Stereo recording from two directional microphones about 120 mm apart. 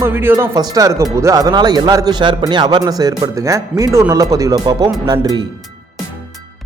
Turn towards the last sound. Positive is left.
turn(degrees=-35)  # may be behind; listen again after turning